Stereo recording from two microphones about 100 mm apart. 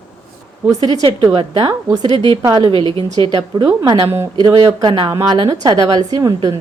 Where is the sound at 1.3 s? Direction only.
65° right (ahead or behind).